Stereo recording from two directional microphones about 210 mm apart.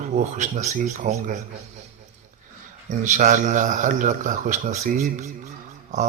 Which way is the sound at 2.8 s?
35° right (ahead or behind).